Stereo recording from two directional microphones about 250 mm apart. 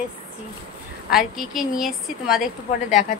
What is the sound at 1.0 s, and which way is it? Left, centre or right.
A woman's voice, centre.